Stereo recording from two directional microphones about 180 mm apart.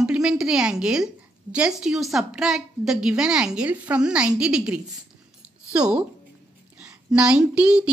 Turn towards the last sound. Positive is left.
turn(degrees=-5)  # may be behind; listen again after turning